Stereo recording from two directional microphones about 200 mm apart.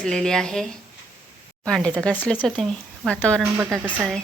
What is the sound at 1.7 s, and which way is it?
A woman's voice, 5° left (ahead or behind).